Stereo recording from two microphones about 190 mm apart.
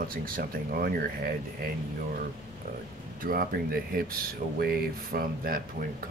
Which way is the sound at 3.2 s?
50° right (ahead or behind).